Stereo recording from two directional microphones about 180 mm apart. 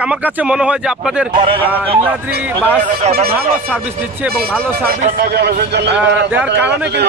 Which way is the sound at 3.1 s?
55° right (ahead or behind).